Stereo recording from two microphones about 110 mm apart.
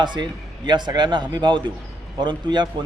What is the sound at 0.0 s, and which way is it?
Speech, 45° right (ahead or behind).